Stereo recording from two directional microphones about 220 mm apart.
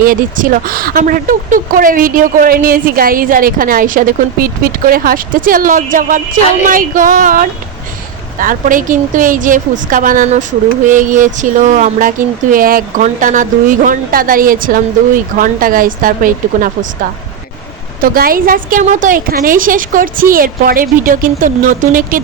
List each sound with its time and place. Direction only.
0.0 s speech: 40° right (ahead or behind)